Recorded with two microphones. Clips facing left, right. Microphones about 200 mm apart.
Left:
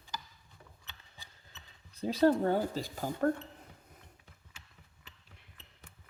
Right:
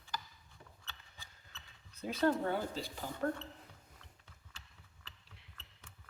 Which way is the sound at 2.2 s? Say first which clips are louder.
Left 6 dB; 40° left (ahead or behind).